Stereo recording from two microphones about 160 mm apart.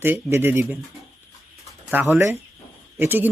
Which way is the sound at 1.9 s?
15° right (ahead or behind).